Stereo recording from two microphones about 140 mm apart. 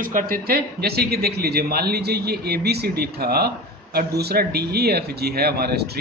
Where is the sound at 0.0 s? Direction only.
85° right.